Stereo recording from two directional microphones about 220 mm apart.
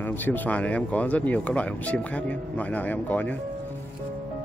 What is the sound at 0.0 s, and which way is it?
Speech, 10° left (ahead or behind).